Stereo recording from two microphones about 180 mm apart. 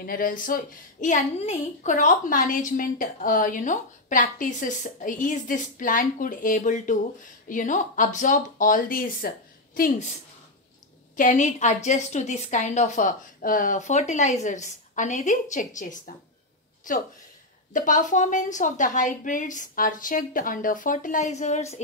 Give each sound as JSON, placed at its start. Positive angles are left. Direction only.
{"t": 0.0, "sound": "a woman's voice", "side_deg": 50}
{"t": 11.1, "sound": "a woman's voice", "side_deg": 45}